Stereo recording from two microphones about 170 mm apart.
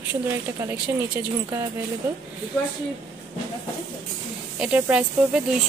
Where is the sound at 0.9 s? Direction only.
15° right (ahead or behind).